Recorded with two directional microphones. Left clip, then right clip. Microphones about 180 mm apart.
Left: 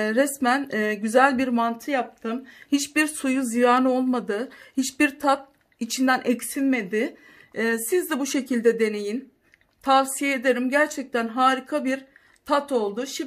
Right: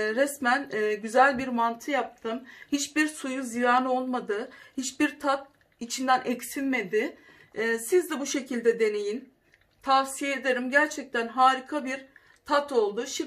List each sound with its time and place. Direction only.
0.0 s speech: 65° left (ahead or behind)